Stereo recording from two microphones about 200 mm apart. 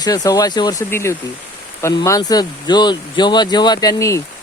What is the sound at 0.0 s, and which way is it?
Speech, 20° left (ahead or behind).